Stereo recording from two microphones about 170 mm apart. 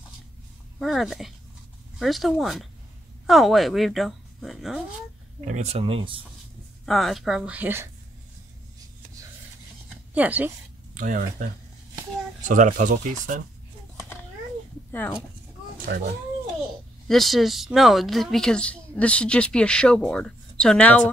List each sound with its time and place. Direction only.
0.7 s a woman's voice: centre (ahead or behind)
5.4 s speech: 45° right (ahead or behind)
6.9 s a woman's voice: centre (ahead or behind)
10.1 s speech: 10° right (ahead or behind)
11.0 s speech: 50° right (ahead or behind)
14.9 s speech: 10° left (ahead or behind)
15.8 s speech: 70° right (ahead or behind)
17.1 s a woman's voice: centre (ahead or behind)